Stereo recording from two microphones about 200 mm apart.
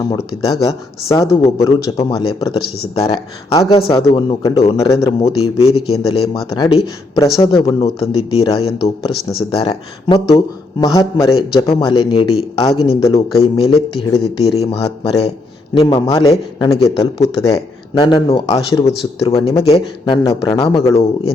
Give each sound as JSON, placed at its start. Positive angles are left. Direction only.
{"t": 0.1, "sound": "a man's voice", "side_deg": 20}